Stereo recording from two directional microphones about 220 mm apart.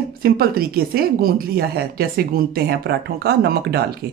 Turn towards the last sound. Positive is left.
turn(degrees=-45)  # may be behind; listen again after turning